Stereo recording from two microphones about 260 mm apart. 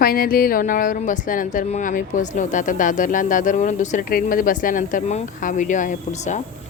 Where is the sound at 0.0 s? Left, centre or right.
Left.